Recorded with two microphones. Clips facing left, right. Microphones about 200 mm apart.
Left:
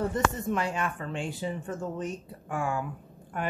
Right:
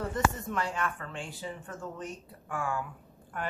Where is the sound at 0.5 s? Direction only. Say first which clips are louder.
Left 3 dB; 20° left (ahead or behind).